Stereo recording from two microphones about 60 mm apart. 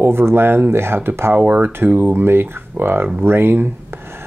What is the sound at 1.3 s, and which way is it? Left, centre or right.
Speech, right.